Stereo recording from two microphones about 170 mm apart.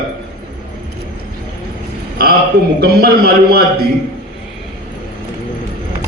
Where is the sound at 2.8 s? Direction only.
65° right (ahead or behind).